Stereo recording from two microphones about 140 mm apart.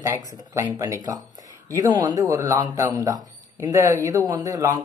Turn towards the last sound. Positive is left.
turn(degrees=-25)  # may be behind; listen again after turning